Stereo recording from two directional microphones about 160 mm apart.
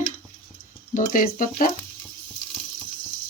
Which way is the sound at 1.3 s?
60° left (ahead or behind).